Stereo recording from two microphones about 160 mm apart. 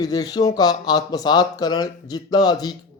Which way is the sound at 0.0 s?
25° left (ahead or behind).